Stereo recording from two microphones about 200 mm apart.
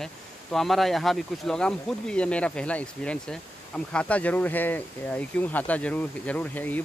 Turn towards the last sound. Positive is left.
turn(degrees=10)  # may be behind; listen again after turning